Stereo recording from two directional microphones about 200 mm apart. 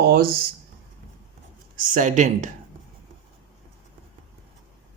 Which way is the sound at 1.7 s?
45° right (ahead or behind).